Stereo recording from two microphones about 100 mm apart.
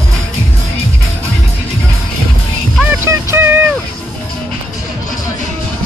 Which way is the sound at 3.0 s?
20° right (ahead or behind).